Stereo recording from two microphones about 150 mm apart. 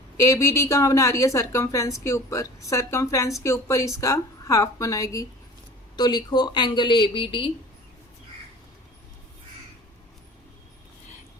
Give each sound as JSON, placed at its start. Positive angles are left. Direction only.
{"t": 0.2, "sound": "a woman's voice", "side_deg": 20}